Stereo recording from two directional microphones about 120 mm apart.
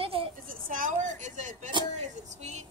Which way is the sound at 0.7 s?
90° right.